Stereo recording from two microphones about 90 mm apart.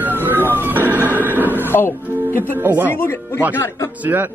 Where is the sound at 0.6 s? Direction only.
20° right (ahead or behind).